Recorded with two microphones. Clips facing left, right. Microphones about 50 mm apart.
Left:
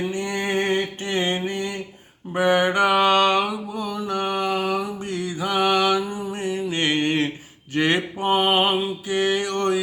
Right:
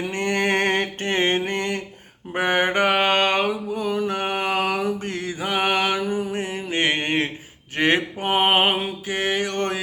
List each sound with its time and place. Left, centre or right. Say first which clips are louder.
0.1 s mantra: right 3 dB; right
2.3 s mantra: left 2 dB; right
5.0 s mantra: left 1 dB; right